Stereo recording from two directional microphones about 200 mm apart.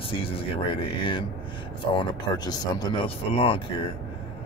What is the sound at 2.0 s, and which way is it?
Speech, 20° left (ahead or behind).